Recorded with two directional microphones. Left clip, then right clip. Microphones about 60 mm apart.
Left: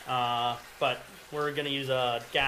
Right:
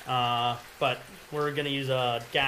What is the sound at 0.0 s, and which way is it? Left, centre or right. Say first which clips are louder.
Speech: right 2 dB; right.